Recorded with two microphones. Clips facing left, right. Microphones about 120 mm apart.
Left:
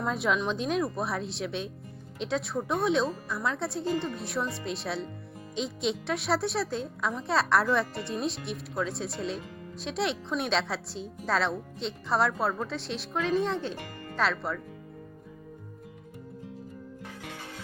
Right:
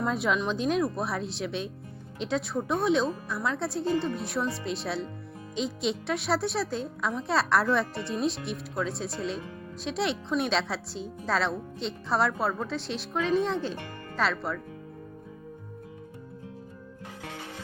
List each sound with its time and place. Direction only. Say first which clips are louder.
0.0 s a woman's voice: right 1 dB; centre (ahead or behind)